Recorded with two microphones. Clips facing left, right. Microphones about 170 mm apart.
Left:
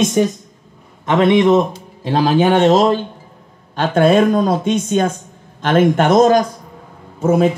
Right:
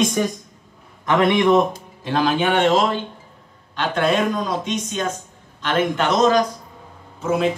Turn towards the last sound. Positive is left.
turn(degrees=45)  # may be behind; listen again after turning